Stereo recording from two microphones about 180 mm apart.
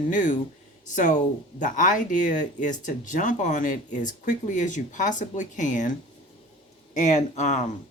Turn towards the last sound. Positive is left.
turn(degrees=40)  # may be behind; listen again after turning